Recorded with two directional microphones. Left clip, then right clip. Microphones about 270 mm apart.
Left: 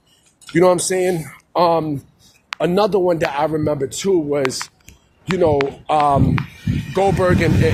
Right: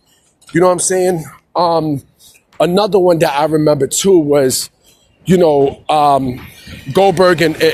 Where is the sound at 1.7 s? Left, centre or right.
Right.